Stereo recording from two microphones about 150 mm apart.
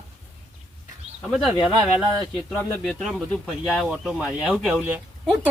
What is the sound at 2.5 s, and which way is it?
Speech, 5° left (ahead or behind).